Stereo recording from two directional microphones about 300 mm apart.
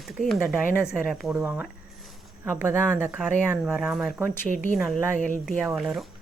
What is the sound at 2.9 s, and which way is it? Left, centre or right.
Speech, centre.